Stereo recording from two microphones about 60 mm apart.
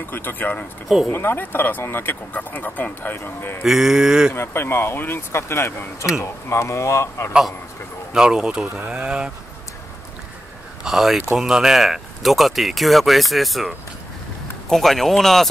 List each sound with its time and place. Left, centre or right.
0.1 s speech: left
3.6 s livestock: centre
4.3 s speech: left
8.1 s livestock: centre
10.8 s speech: centre
14.7 s speech: centre